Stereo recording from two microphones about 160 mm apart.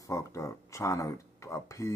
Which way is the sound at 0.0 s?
20° left (ahead or behind).